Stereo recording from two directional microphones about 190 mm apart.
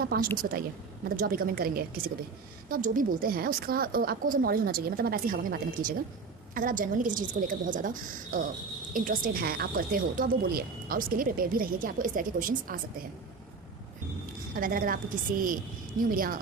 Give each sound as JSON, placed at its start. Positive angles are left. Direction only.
{"t": 0.0, "sound": "a sound", "side_deg": -55}
{"t": 1.0, "sound": "speech", "side_deg": -50}
{"t": 14.5, "sound": "speech", "side_deg": -50}